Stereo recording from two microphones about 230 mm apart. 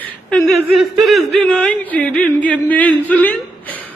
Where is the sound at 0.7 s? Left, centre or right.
Centre.